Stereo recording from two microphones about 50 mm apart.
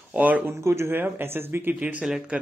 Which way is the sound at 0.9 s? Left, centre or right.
Right.